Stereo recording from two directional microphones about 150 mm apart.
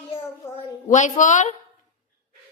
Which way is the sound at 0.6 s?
55° left (ahead or behind).